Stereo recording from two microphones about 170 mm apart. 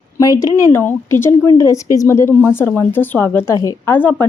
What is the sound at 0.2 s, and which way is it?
A woman's voice, 20° left (ahead or behind).